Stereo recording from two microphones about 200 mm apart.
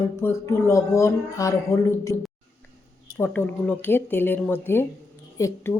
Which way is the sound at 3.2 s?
10° left (ahead or behind).